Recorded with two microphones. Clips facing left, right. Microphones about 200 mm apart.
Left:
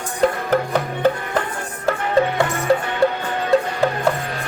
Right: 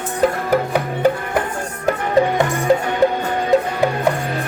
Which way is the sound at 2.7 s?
20° right (ahead or behind).